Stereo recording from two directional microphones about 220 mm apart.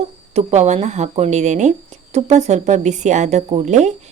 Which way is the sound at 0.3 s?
30° right (ahead or behind).